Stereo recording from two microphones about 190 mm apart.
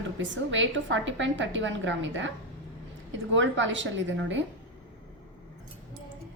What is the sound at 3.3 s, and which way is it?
A woman's voice, 75° right (ahead or behind).